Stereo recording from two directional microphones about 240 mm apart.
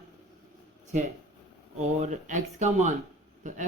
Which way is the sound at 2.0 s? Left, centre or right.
Right.